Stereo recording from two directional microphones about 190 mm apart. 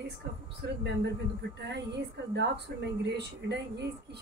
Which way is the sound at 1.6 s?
65° right (ahead or behind).